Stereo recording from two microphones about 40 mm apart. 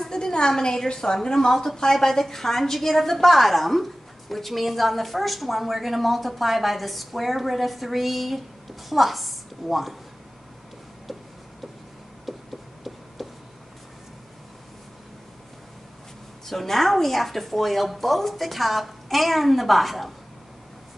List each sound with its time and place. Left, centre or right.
0.1 s a woman's voice: centre
12.3 s a sound: centre
16.4 s a woman's voice: centre